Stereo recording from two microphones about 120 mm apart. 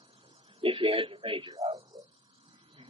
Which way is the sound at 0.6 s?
50° right (ahead or behind).